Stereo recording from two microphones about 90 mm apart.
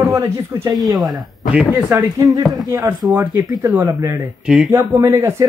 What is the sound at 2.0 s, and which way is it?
Speech, 50° right (ahead or behind).